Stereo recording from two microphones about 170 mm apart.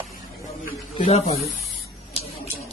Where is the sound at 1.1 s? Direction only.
40° left (ahead or behind).